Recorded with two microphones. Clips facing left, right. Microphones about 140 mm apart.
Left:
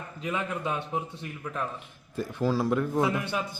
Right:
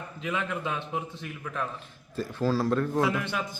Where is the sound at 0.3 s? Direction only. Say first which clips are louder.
Even; 10° left (ahead or behind).